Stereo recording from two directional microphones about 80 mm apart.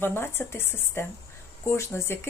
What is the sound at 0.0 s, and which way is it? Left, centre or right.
Speech, left.